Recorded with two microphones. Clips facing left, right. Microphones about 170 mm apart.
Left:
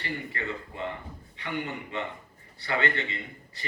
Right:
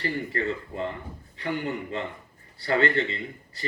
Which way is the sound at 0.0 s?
40° right (ahead or behind).